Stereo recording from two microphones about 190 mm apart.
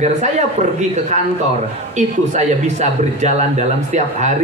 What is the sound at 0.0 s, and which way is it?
Speech, 35° right (ahead or behind).